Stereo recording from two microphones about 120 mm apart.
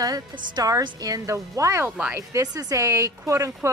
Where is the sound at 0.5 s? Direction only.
35° right (ahead or behind).